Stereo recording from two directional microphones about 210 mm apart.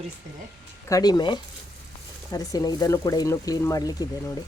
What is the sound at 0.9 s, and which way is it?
Speech, 20° left (ahead or behind).